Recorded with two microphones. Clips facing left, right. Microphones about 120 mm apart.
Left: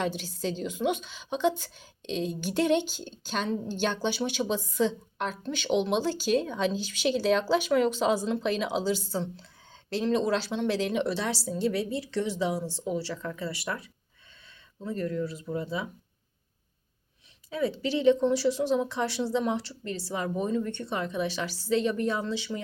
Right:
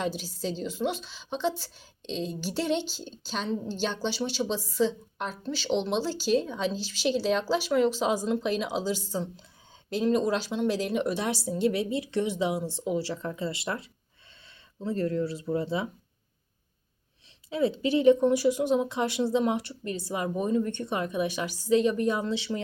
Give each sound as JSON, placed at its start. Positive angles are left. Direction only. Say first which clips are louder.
{"t": 0.2, "sound": "a woman's voice", "louder": "left 1 dB", "side_deg": -5}
{"t": 17.5, "sound": "speech", "louder": "right 3 dB", "side_deg": -25}